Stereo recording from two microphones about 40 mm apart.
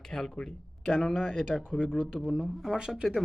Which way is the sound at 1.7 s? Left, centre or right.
Left.